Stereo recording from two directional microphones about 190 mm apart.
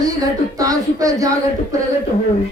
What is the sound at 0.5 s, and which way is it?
Speech, 20° right (ahead or behind).